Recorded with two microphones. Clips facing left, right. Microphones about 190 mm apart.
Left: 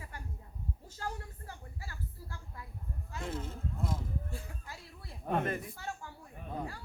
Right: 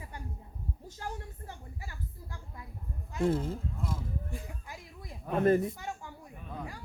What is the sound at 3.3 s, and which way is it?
Speech, 35° right (ahead or behind).